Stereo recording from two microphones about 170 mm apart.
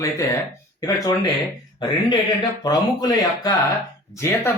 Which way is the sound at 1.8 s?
25° left (ahead or behind).